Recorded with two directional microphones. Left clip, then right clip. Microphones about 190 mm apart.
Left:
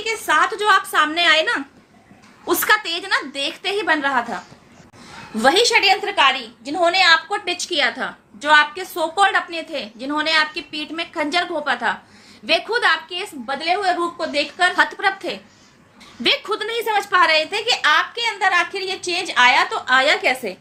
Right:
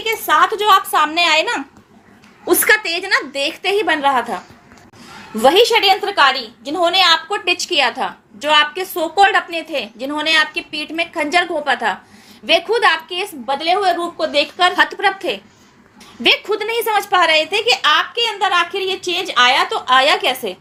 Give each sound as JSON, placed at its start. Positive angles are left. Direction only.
{"t": 0.0, "sound": "a woman's voice", "side_deg": -15}
{"t": 5.4, "sound": "a woman's voice", "side_deg": -10}
{"t": 16.6, "sound": "speech", "side_deg": -20}
{"t": 17.1, "sound": "a woman's voice", "side_deg": -5}